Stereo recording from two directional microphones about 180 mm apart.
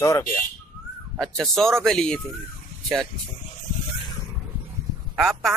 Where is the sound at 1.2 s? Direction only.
Centre (ahead or behind).